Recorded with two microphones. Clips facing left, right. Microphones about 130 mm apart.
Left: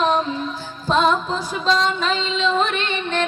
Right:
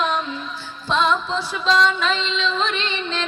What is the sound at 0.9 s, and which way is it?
Music, 45° left (ahead or behind).